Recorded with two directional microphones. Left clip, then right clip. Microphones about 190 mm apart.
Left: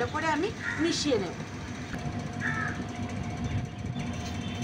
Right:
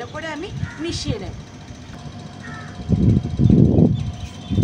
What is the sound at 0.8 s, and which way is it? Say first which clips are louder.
Speech: even; 15° right (ahead or behind).